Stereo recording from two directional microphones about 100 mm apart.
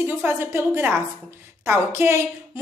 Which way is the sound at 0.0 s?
25° right (ahead or behind).